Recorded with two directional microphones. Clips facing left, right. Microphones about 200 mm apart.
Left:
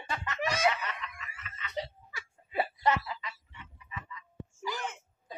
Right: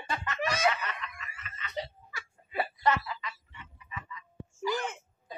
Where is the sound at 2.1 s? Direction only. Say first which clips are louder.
Left 1 dB; 20° left (ahead or behind).